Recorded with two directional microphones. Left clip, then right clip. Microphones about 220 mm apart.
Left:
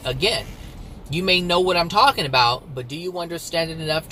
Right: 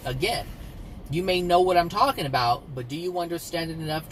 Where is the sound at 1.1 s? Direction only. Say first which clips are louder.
Left 3 dB; 15° left (ahead or behind).